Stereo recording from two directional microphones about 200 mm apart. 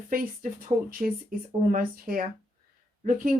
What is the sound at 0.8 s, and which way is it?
Speech, 45° right (ahead or behind).